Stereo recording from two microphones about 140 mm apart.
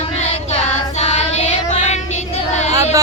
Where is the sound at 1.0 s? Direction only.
50° left (ahead or behind).